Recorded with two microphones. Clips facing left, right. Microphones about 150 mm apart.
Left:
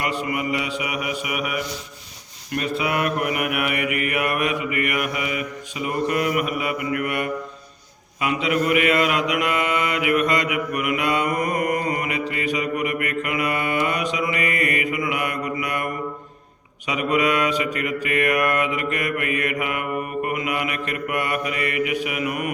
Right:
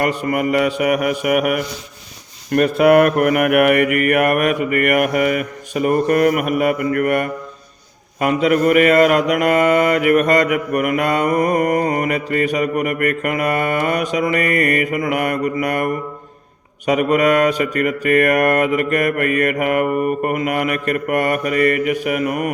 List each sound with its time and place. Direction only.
0.0 s mantra: 50° right (ahead or behind)